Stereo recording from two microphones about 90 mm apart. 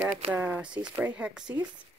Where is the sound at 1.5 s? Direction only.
30° right (ahead or behind).